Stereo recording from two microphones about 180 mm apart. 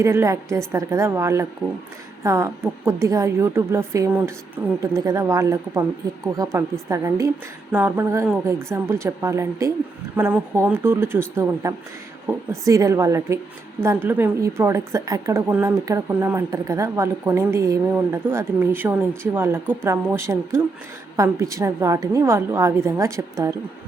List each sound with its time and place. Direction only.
0.0 s a woman's voice: 15° right (ahead or behind)
12.3 s a woman's voice: 15° right (ahead or behind)